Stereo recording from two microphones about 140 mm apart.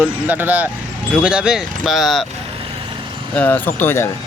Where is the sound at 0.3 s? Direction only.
10° right (ahead or behind).